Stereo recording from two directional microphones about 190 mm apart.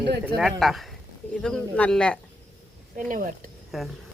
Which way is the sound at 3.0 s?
45° right (ahead or behind).